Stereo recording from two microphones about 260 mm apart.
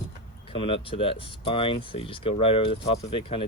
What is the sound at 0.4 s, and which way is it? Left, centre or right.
Speech, centre.